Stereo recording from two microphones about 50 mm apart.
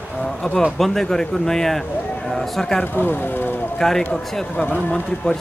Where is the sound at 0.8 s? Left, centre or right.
Centre.